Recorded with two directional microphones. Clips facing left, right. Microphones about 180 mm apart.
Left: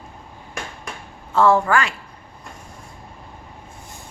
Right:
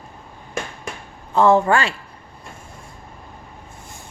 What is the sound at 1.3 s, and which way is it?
Speech, 20° right (ahead or behind).